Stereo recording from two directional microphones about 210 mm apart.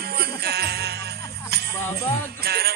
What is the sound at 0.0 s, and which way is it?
Music, 50° right (ahead or behind).